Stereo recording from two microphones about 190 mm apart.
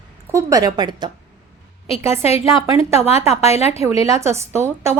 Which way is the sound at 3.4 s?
35° left (ahead or behind).